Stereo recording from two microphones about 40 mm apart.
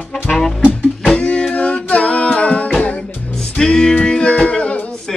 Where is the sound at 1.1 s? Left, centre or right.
Left.